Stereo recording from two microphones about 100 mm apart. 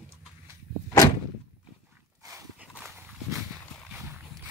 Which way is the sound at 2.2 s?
35° right (ahead or behind).